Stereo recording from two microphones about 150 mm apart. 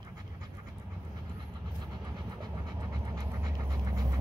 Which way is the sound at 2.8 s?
25° right (ahead or behind).